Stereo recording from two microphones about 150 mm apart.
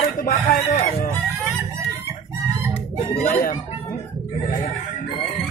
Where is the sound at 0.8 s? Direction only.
50° left (ahead or behind).